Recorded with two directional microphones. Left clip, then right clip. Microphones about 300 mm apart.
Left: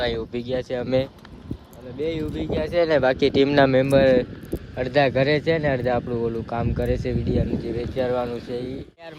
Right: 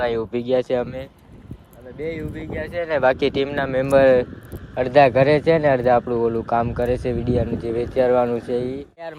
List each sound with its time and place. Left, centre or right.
0.3 s speech: centre
2.0 s speech: centre
2.6 s speech: centre
2.9 s speech: centre